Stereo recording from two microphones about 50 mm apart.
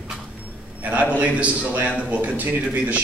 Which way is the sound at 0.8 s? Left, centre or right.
Right.